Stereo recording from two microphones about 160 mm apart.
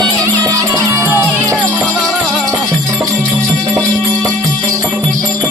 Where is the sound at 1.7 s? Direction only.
Centre (ahead or behind).